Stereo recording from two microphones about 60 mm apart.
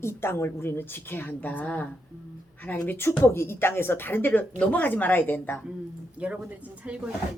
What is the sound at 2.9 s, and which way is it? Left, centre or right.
A woman's voice, left.